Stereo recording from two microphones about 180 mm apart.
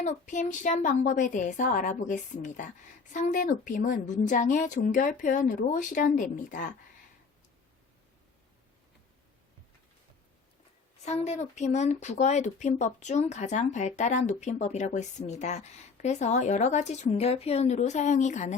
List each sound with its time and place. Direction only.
0.0 s a woman's voice: 45° left (ahead or behind)
11.0 s speech: 40° left (ahead or behind)